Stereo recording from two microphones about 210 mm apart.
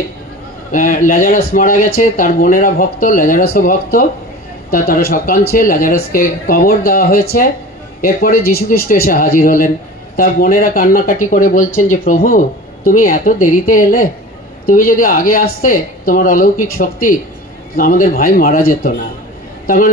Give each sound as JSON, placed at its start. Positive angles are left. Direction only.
{"t": 0.7, "sound": "a man's voice", "side_deg": 40}